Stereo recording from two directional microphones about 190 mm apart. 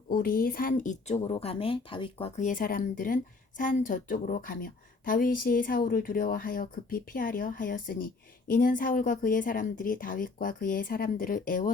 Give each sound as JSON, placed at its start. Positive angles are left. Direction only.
{"t": 0.1, "sound": "a woman's voice", "side_deg": 50}